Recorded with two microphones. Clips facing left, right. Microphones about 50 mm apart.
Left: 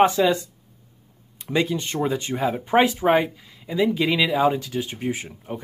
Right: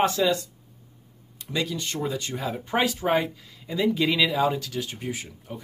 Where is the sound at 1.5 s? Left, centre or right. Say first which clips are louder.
Left 6 dB; left; by 4.3 s centre.